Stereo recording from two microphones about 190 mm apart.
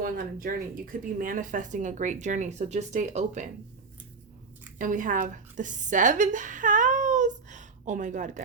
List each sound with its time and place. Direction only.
0.0 s speech: 45° right (ahead or behind)
4.8 s a woman's voice: 45° right (ahead or behind)